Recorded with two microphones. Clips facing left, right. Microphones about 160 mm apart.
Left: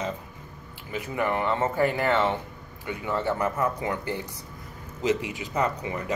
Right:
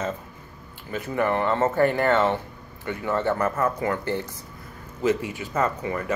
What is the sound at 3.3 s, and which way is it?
Speech, 15° left (ahead or behind).